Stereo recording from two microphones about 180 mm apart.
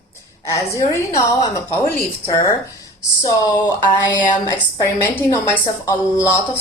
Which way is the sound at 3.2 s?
20° left (ahead or behind).